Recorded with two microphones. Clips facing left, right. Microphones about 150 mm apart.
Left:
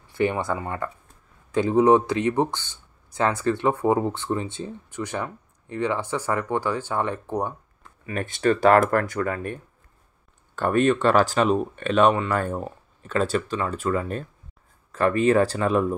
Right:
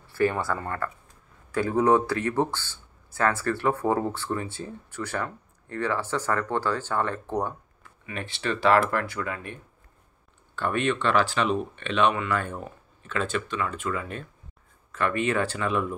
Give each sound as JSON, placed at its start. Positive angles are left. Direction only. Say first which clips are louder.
{"t": 0.0, "sound": "speech", "louder": "left 1 dB", "side_deg": 20}
{"t": 8.0, "sound": "speech", "louder": "left 8 dB", "side_deg": 45}